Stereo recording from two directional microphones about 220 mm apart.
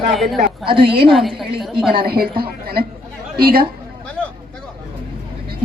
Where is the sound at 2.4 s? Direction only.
45° right (ahead or behind).